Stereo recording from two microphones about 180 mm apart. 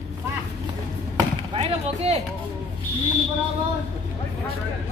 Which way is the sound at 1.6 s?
35° right (ahead or behind).